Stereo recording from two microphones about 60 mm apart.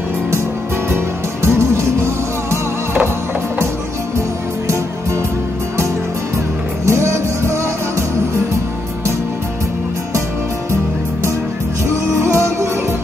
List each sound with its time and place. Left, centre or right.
0.9 s music: right
6.9 s music: right
12.2 s music: right